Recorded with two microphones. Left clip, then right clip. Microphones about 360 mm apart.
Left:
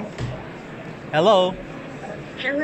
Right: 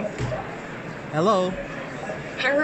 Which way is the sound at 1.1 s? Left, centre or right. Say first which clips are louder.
Left 5 dB; left.